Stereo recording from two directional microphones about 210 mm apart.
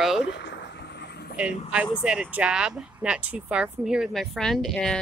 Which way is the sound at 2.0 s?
5° right (ahead or behind).